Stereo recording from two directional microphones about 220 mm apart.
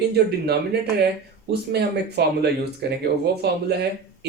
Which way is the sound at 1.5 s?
50° right (ahead or behind).